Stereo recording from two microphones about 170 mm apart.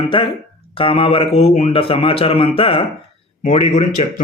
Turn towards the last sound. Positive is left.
turn(degrees=45)  # may be behind; listen again after turning